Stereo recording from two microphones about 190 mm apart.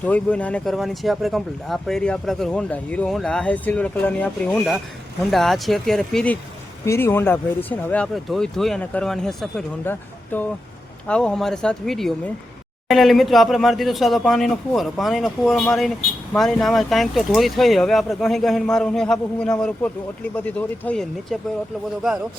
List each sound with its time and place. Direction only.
0.0 s speech: 5° left (ahead or behind)
6.8 s speech: 15° left (ahead or behind)